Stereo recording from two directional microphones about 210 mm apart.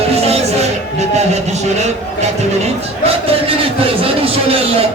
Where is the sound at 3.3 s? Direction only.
25° right (ahead or behind).